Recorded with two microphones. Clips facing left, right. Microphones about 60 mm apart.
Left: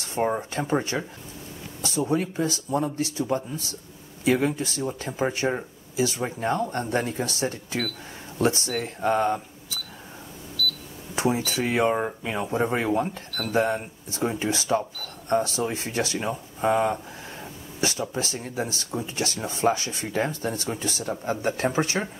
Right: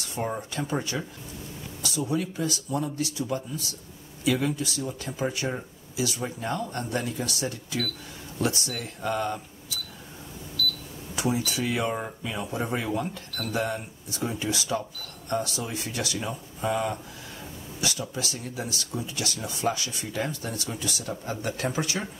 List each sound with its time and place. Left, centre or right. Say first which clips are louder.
0.0 s speech: left 6 dB; left
11.1 s speech: left 3 dB; left